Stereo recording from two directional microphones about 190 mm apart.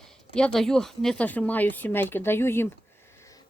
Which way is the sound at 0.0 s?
5° left (ahead or behind).